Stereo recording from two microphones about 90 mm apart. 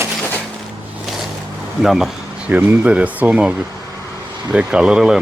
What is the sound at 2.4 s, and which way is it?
Speech, 15° right (ahead or behind).